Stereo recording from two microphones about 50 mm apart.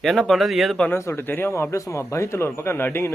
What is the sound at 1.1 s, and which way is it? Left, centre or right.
Speech, left.